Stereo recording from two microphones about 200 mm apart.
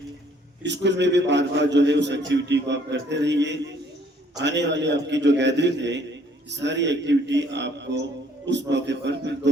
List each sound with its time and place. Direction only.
0.6 s a man's voice: 60° right (ahead or behind)